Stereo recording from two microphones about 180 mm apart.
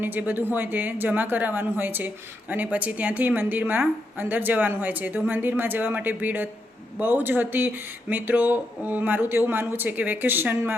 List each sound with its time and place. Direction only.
0.0 s speech: 10° right (ahead or behind)